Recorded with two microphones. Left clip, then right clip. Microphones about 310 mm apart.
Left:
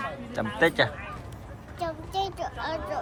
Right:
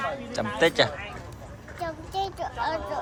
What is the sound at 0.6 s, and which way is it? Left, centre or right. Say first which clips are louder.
Speech: right 1 dB; centre.